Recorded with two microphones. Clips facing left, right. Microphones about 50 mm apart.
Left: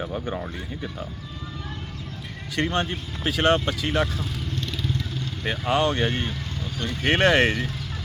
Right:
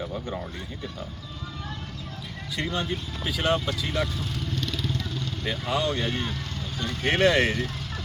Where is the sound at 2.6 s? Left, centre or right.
Left.